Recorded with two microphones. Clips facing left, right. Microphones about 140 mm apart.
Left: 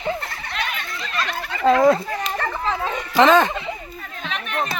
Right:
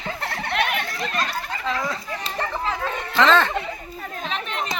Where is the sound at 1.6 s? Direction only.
50° left (ahead or behind).